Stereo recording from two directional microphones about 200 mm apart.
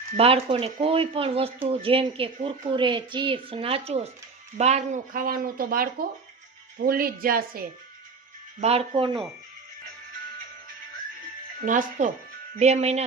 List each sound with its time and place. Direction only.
0.2 s a woman's voice: 30° right (ahead or behind); by 7.7 s 45° right (ahead or behind)
8.6 s a woman's voice: 30° right (ahead or behind)
11.6 s speech: 40° right (ahead or behind)